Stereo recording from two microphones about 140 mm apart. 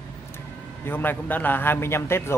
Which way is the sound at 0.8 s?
15° left (ahead or behind).